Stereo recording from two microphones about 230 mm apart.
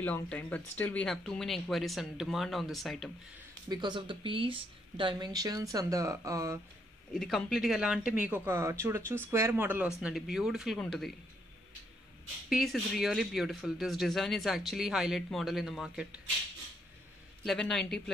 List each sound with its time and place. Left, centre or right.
0.0 s speech: centre
3.6 s speech: centre
7.2 s speech: centre
12.4 s speech: centre
17.4 s speech: centre